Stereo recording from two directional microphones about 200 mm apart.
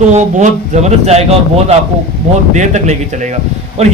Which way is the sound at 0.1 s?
35° right (ahead or behind).